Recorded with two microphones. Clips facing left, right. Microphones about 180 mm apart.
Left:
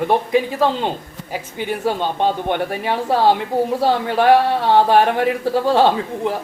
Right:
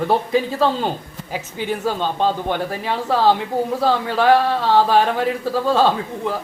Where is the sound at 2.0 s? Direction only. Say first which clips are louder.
Left 1 dB; 15° left (ahead or behind).